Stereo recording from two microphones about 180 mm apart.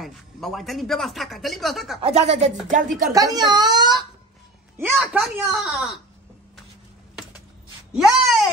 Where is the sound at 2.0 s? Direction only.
35° right (ahead or behind).